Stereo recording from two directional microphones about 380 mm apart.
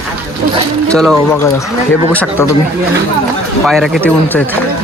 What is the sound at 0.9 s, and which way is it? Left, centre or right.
Speech, centre.